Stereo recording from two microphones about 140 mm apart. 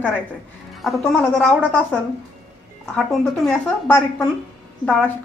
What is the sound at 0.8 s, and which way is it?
Speech, centre (ahead or behind).